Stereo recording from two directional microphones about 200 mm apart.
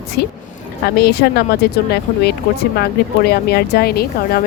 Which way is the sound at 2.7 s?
50° left (ahead or behind).